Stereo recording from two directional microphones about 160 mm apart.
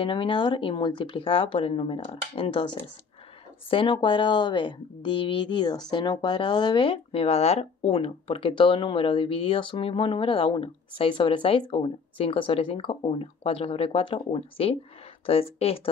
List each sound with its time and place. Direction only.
0.0 s a woman's voice: 30° left (ahead or behind)